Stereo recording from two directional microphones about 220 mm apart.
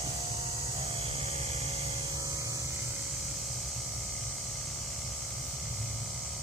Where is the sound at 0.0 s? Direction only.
25° right (ahead or behind).